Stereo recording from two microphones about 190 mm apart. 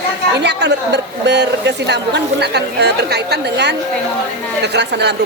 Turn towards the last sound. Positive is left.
turn(degrees=-65)  # may be behind; listen again after turning